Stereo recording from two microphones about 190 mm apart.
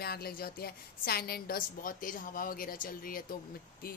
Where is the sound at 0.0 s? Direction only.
55° left (ahead or behind).